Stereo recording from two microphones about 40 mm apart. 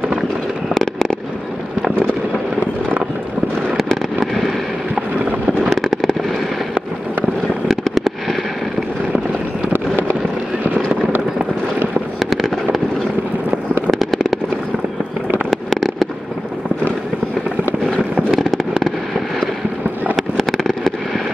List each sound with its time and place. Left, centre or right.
4.3 s fireworks: centre
5.8 s fireworks: centre
7.6 s fireworks: centre
10.7 s a sound: right
12.3 s fireworks: centre
13.8 s fireworks: centre
15.5 s fireworks: centre
18.3 s fireworks: centre
20.2 s a sound: centre